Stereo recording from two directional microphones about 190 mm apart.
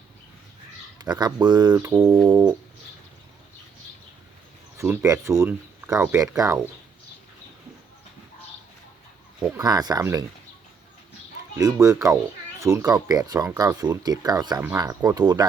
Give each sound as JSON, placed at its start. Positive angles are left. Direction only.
{"t": 0.9, "sound": "speech", "side_deg": -20}
{"t": 4.8, "sound": "speech", "side_deg": -15}
{"t": 9.6, "sound": "speech", "side_deg": -20}
{"t": 11.5, "sound": "speech", "side_deg": -15}